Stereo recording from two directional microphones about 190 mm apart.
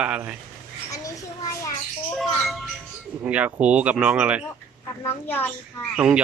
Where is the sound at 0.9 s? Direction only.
15° left (ahead or behind).